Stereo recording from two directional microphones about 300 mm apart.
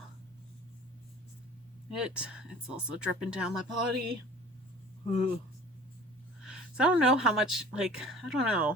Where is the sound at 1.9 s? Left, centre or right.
Centre.